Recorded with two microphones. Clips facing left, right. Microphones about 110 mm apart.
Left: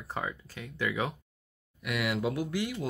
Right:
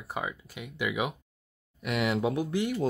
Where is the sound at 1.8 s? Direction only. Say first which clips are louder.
Right 3 dB; 25° right (ahead or behind).